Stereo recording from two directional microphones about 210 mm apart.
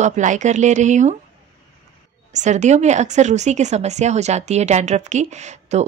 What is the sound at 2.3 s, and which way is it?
Speech, 35° right (ahead or behind).